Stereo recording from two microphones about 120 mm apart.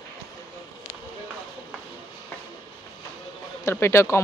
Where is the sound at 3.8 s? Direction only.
20° left (ahead or behind).